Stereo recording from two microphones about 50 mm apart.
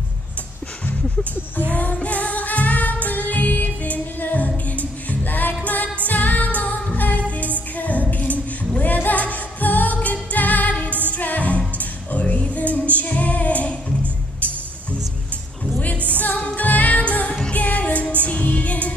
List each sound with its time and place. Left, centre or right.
1.7 s music: left
7.7 s singing: left
10.3 s music: left
16.2 s music: left
17.3 s music: left